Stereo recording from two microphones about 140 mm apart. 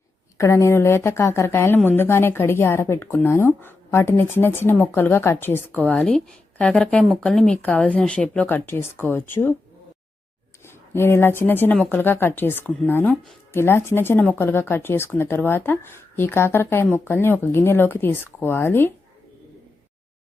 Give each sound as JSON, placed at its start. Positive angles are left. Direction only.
{"t": 0.3, "sound": "speech", "side_deg": 20}
{"t": 10.7, "sound": "speech", "side_deg": 15}